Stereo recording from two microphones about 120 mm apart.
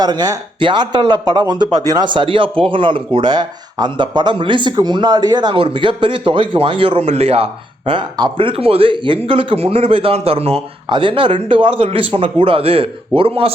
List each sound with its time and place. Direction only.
0.0 s speech: 35° right (ahead or behind); by 10.9 s 55° right (ahead or behind)
10.9 s speech: 45° right (ahead or behind)